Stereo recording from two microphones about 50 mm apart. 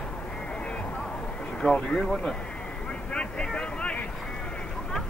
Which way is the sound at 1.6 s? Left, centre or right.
Centre.